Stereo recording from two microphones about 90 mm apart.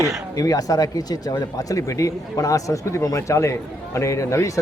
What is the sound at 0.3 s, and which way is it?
Speech, 40° left (ahead or behind).